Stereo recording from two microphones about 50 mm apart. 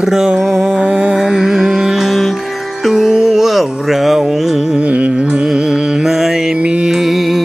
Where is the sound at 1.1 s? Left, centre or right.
Centre.